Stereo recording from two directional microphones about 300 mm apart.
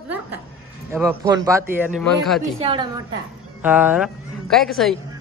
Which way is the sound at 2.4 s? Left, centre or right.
Centre.